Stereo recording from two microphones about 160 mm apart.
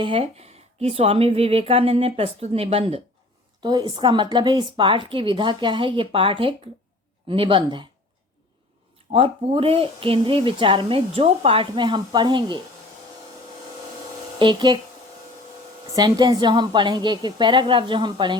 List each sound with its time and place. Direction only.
0.0 s speech: 35° right (ahead or behind)
3.6 s speech: 25° right (ahead or behind)
9.1 s speech: 35° right (ahead or behind)
14.3 s a woman's voice: 30° right (ahead or behind)
16.0 s a woman's voice: 25° right (ahead or behind)